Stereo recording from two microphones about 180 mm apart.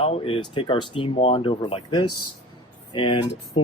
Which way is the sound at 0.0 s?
30° left (ahead or behind).